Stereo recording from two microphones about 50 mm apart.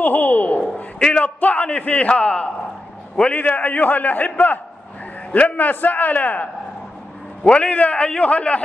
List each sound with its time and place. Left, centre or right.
0.0 s a sound: left
1.2 s a man's voice: left
7.4 s a man's voice: left